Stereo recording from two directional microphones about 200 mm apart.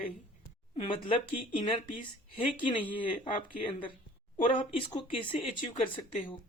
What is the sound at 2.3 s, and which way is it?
Speech, 25° left (ahead or behind).